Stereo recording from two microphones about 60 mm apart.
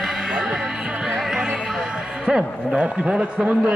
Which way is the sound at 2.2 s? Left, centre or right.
Centre.